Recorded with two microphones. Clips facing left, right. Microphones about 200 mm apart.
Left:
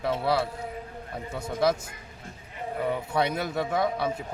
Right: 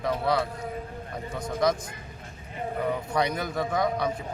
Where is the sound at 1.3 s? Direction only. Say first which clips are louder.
Even; 5° left (ahead or behind).